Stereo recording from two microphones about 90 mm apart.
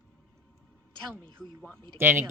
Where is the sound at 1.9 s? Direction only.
25° right (ahead or behind).